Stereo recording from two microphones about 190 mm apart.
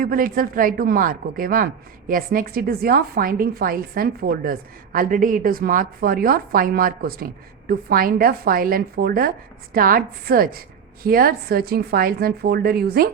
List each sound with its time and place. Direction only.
0.0 s a woman's voice: 50° right (ahead or behind)